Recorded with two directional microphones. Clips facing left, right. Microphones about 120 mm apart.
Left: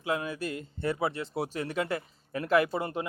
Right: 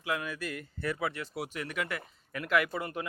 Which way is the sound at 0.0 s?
30° left (ahead or behind).